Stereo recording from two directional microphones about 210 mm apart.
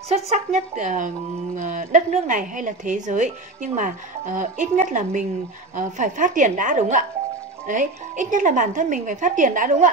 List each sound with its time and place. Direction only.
0.1 s speech: 30° right (ahead or behind)